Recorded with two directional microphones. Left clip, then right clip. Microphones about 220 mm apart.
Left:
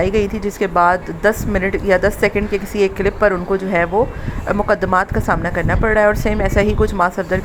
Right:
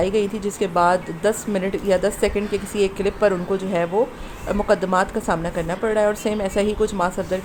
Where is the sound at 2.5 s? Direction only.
40° left (ahead or behind).